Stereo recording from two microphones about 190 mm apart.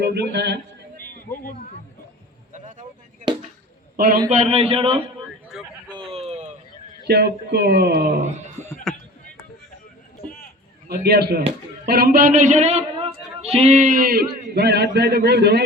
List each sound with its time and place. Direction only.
0.0 s speech: 60° right (ahead or behind)
1.5 s speech: 45° left (ahead or behind)
2.5 s vehicle: 40° right (ahead or behind)
3.9 s a man's voice: 50° right (ahead or behind)
4.3 s a man's voice: 35° right (ahead or behind)
5.5 s a sound: centre (ahead or behind)
5.9 s a sound: 30° right (ahead or behind)
7.1 s a man's voice: 60° right (ahead or behind)
8.6 s a sound: 15° left (ahead or behind)
10.8 s a man's voice: 55° right (ahead or behind)